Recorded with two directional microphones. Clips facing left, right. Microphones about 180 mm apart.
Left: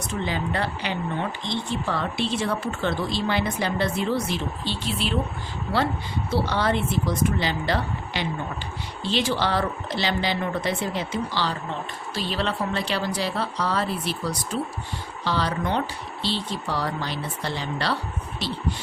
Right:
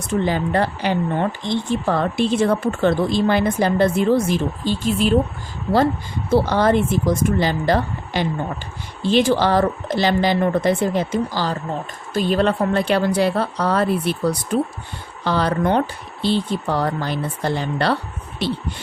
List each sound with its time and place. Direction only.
0.1 s speech: 50° right (ahead or behind)
6.3 s speech: 45° right (ahead or behind)